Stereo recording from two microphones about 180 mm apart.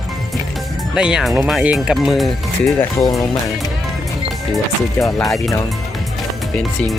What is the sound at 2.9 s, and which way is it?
Speech, 15° left (ahead or behind).